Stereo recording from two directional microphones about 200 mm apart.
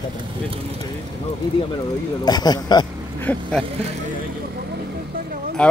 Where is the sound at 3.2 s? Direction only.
5° left (ahead or behind).